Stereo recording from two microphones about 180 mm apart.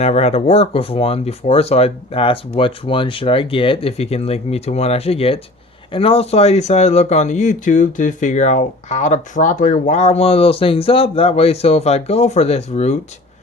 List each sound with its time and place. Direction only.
0.0 s speech: 35° left (ahead or behind)